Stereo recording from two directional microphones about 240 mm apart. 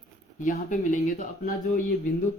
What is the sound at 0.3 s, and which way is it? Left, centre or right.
Speech, left.